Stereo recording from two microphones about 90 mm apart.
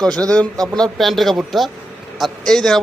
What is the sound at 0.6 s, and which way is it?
A man's voice, 5° left (ahead or behind).